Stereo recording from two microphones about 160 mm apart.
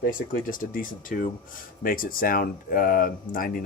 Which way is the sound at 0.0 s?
60° left (ahead or behind).